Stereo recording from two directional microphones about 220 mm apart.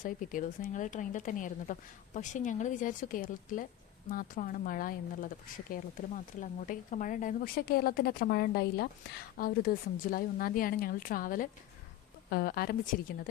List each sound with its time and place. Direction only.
0.0 s a woman's voice: 40° left (ahead or behind)